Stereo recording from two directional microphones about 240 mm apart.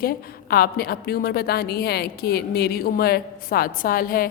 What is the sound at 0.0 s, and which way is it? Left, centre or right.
A woman's voice, left.